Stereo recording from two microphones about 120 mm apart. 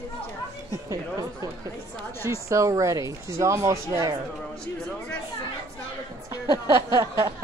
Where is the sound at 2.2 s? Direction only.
25° right (ahead or behind).